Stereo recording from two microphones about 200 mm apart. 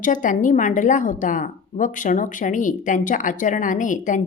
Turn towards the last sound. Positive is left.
turn(degrees=40)  # may be behind; listen again after turning